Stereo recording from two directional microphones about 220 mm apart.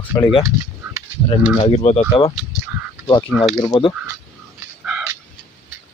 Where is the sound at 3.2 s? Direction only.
Centre (ahead or behind).